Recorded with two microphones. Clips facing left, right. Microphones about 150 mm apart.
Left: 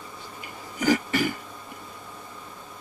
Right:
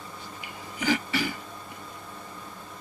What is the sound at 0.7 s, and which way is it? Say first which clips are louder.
Cough: left 4 dB; 45° left (ahead or behind).